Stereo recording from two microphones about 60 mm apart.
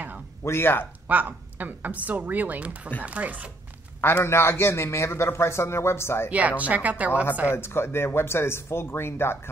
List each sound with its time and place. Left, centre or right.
0.4 s speech: left
1.0 s a woman's voice: right
4.0 s a man's voice: left
6.3 s a woman's voice: right
7.4 s a man's voice: left